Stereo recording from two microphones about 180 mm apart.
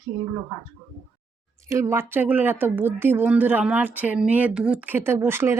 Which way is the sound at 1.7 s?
15° right (ahead or behind).